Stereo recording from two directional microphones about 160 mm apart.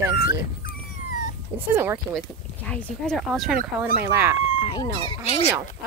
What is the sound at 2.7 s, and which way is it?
Speech, 10° left (ahead or behind).